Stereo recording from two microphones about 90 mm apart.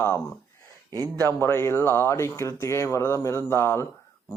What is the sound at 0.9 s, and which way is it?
Speech, 45° right (ahead or behind).